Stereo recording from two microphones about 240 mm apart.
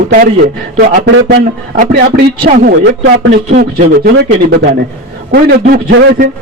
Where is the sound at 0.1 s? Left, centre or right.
Right.